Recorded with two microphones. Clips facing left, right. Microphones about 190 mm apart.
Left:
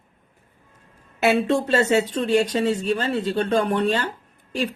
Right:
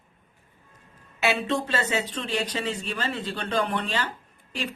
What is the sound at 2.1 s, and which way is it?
Speech, 45° left (ahead or behind).